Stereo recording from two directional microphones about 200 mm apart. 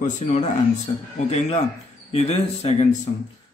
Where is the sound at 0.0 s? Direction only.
35° left (ahead or behind).